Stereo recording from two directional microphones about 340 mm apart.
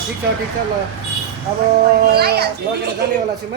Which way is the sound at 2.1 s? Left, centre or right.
Right.